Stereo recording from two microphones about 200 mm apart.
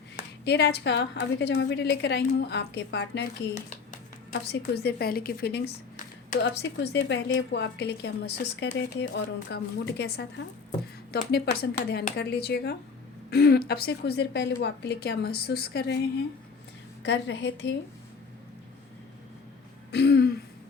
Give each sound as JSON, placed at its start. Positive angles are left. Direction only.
{"t": 0.4, "sound": "a woman's voice", "side_deg": 55}
{"t": 4.3, "sound": "a woman's voice", "side_deg": 55}
{"t": 17.0, "sound": "a woman's voice", "side_deg": 65}
{"t": 19.9, "sound": "throat clearing", "side_deg": 55}